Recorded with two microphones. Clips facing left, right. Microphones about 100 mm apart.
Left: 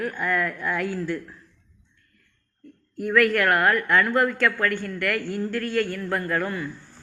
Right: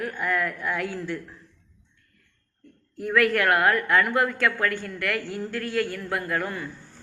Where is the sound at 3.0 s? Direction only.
20° right (ahead or behind).